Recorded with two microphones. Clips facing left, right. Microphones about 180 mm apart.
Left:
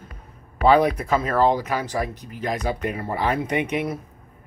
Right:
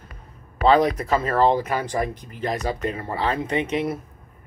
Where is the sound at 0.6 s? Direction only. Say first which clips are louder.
Even; 10° left (ahead or behind).